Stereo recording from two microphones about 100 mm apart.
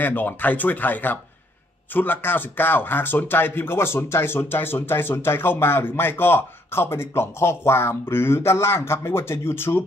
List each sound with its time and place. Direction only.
0.0 s speech: 20° left (ahead or behind)